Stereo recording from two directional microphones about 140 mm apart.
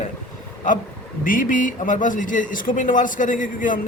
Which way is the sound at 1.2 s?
80° left.